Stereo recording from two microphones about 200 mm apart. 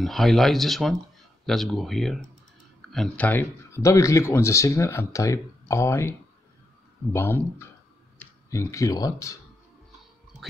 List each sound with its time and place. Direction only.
0.0 s speech: centre (ahead or behind); by 9.4 s 15° left (ahead or behind)